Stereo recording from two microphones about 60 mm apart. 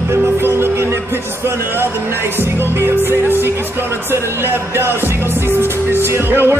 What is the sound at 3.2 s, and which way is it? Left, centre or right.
Music, right.